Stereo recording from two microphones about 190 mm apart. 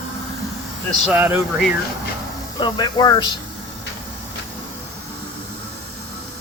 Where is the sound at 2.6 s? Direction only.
20° left (ahead or behind).